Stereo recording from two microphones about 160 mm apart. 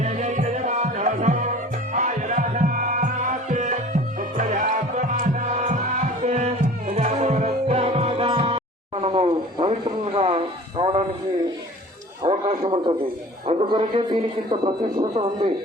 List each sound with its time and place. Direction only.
0.0 s music: 45° right (ahead or behind)
12.2 s a sound: 30° right (ahead or behind)
13.5 s a man's voice: 35° right (ahead or behind)